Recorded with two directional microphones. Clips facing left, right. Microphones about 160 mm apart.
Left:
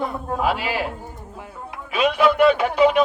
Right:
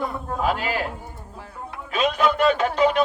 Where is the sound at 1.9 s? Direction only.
10° left (ahead or behind).